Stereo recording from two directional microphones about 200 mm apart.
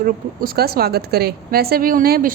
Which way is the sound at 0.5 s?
50° right (ahead or behind).